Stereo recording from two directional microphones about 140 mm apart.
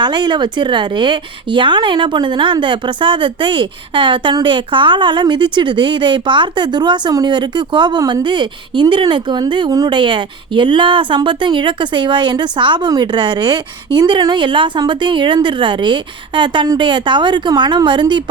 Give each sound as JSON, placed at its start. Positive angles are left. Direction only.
{"t": 0.0, "sound": "a woman's voice", "side_deg": -30}